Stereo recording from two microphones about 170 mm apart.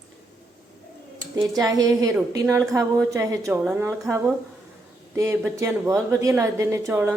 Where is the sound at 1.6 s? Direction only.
20° right (ahead or behind).